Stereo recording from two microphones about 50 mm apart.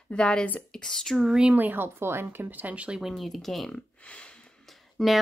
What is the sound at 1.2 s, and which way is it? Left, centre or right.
Speech, centre.